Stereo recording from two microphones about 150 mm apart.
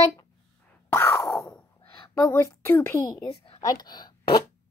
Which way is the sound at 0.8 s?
15° left (ahead or behind).